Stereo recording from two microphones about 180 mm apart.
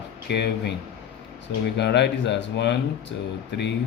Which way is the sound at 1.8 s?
75° left (ahead or behind).